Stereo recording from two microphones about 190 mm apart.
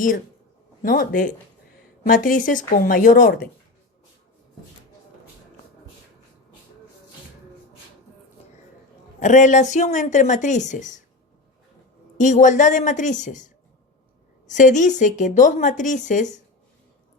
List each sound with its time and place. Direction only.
0.8 s a woman's voice: 45° left (ahead or behind)
9.2 s a woman's voice: 40° left (ahead or behind)
12.1 s a woman's voice: 40° left (ahead or behind)